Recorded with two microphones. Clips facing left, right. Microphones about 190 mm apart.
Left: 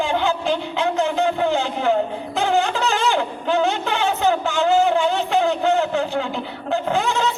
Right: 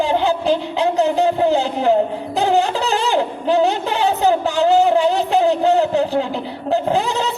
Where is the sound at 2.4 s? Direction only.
35° right (ahead or behind).